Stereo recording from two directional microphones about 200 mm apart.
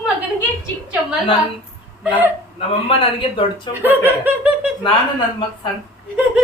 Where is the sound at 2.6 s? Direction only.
25° left (ahead or behind).